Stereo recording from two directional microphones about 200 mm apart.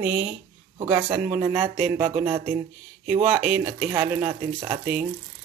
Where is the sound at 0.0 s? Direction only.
5° right (ahead or behind).